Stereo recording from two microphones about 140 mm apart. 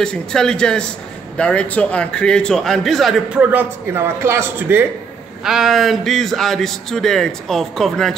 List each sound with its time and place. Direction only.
0.0 s a man's voice: 5° left (ahead or behind)
3.4 s a man's voice: 15° right (ahead or behind)
5.4 s a man's voice: 5° right (ahead or behind)